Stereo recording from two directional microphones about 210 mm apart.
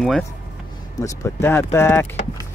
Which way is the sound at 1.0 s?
15° left (ahead or behind).